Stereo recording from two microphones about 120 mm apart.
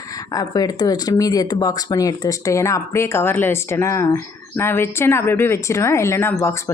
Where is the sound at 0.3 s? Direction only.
30° left (ahead or behind).